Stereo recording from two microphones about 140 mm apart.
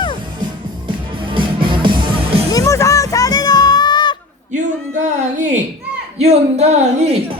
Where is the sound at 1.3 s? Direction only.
35° right (ahead or behind).